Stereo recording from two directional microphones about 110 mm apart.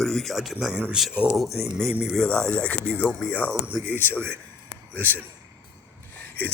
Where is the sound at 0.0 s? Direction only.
5° left (ahead or behind).